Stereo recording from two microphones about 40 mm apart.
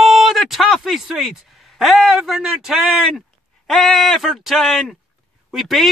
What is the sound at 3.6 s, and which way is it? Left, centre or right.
Speech, centre.